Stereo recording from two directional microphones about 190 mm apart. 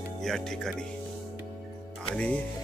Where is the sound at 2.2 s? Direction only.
5° left (ahead or behind).